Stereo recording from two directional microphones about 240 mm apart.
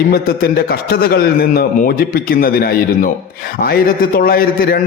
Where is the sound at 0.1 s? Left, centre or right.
Left.